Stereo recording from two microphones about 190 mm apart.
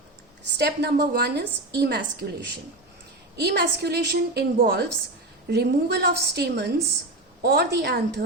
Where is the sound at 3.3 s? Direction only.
60° right (ahead or behind).